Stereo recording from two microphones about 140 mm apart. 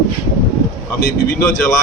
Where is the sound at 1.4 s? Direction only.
20° left (ahead or behind).